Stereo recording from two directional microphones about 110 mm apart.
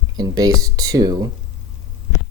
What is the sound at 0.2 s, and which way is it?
Speech, 35° right (ahead or behind).